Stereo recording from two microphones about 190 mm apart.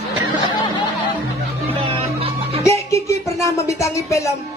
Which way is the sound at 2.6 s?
15° left (ahead or behind).